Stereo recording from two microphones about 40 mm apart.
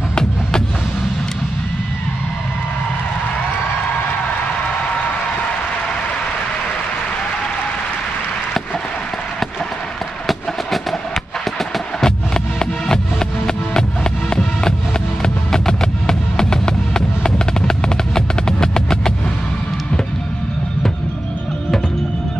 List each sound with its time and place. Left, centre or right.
0.1 s music: centre
10.2 s music: centre
12.0 s music: centre
15.2 s music: centre